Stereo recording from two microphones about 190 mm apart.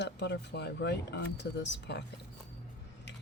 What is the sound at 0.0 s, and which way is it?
Speech, 65° left (ahead or behind).